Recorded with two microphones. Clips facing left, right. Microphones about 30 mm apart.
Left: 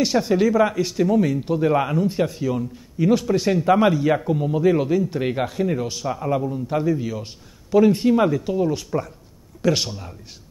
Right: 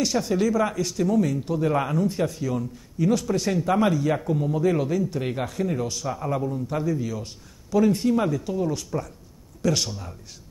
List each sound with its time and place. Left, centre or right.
0.0 s a man's voice: left